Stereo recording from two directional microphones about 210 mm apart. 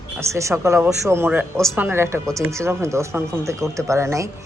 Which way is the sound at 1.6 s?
Centre (ahead or behind).